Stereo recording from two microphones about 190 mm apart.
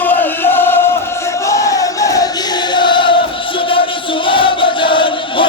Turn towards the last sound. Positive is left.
turn(degrees=25)  # may be behind; listen again after turning